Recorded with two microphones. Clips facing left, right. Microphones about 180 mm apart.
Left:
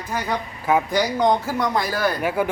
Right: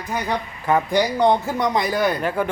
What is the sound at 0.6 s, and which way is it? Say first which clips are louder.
Speech: even; 5° left (ahead or behind).